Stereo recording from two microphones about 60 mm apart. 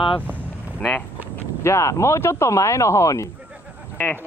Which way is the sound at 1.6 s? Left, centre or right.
Left.